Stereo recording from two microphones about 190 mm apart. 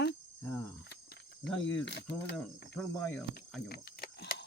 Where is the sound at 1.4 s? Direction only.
5° left (ahead or behind).